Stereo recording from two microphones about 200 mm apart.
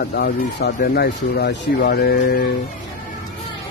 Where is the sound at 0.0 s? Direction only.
50° left (ahead or behind).